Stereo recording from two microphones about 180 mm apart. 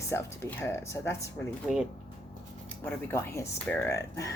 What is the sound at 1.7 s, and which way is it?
Speech, 5° right (ahead or behind).